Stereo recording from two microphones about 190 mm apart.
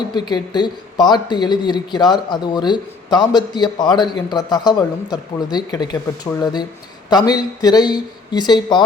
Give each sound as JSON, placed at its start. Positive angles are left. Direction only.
{"t": 0.1, "sound": "a man's voice", "side_deg": 20}